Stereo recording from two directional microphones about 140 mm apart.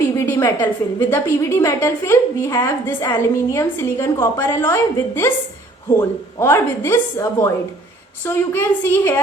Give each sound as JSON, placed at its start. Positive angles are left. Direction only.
{"t": 0.0, "sound": "a woman's voice", "side_deg": 15}